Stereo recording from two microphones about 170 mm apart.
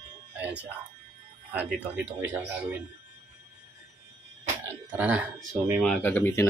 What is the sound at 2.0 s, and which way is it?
Speech, 10° right (ahead or behind).